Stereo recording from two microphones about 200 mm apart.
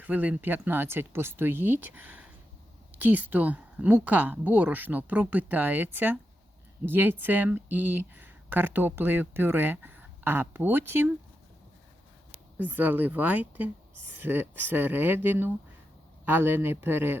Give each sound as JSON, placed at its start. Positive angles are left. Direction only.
{"t": 0.0, "sound": "speech", "side_deg": -10}
{"t": 12.5, "sound": "speech", "side_deg": -10}